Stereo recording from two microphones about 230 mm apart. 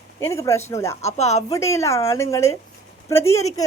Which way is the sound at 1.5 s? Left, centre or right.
Centre.